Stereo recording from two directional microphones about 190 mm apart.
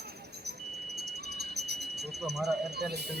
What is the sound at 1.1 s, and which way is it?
Speech, 60° right (ahead or behind).